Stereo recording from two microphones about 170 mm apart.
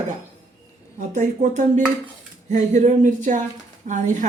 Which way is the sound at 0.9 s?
45° right (ahead or behind).